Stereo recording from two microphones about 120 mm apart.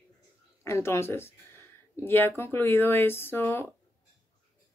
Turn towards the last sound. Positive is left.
turn(degrees=20)  # may be behind; listen again after turning